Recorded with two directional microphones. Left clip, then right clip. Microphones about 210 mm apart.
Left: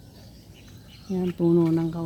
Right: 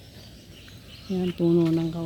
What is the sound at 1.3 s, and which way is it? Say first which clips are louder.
Speech: left 1 dB; centre (ahead or behind).